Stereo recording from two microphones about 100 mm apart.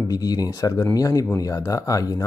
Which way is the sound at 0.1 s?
40° left (ahead or behind).